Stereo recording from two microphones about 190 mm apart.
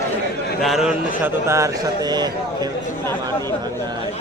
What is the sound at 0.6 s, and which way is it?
A man's voice, centre (ahead or behind).